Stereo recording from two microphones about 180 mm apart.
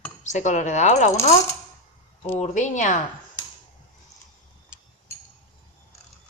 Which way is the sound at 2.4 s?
45° left (ahead or behind).